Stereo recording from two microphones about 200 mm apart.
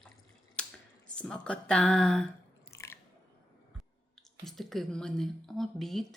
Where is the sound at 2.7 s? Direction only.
15° left (ahead or behind).